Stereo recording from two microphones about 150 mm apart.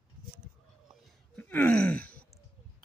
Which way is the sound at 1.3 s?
10° left (ahead or behind).